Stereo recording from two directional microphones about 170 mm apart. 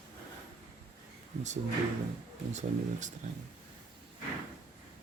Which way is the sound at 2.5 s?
45° right (ahead or behind).